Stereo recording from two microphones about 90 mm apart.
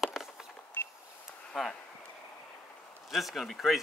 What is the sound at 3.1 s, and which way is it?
Speech, centre (ahead or behind).